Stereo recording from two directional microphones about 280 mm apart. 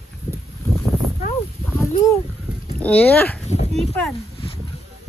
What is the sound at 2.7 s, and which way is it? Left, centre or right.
Speech, centre.